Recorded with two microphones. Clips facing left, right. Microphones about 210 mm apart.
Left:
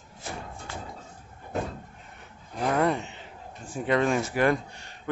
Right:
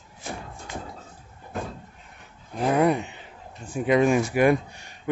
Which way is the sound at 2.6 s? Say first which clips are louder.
Right 4 dB; 15° right (ahead or behind).